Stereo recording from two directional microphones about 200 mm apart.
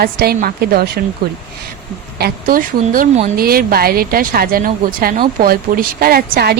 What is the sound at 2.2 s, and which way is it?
A woman's voice, 45° right (ahead or behind).